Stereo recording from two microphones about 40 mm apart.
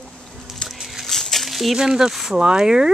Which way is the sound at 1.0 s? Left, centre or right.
Centre.